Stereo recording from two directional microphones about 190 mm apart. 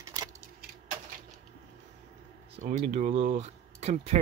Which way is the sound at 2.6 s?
40° right (ahead or behind).